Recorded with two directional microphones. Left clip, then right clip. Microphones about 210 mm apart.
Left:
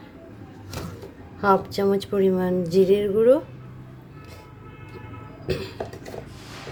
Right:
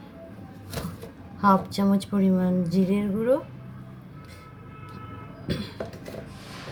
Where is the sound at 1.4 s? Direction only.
20° left (ahead or behind).